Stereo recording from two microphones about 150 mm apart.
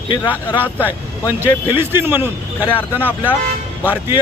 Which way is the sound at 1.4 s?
15° right (ahead or behind).